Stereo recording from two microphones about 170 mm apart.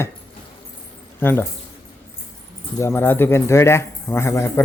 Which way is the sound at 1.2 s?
10° left (ahead or behind).